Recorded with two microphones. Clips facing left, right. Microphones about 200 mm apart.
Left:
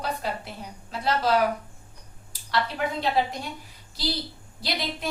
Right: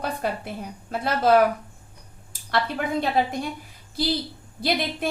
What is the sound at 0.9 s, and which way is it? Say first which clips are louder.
Speech: right 4 dB; 55° right (ahead or behind).